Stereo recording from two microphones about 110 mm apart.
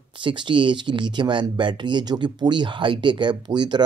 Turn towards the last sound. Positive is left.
turn(degrees=-40)  # may be behind; listen again after turning